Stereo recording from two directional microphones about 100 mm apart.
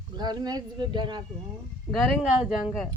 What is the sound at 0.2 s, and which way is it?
Speech, 45° right (ahead or behind).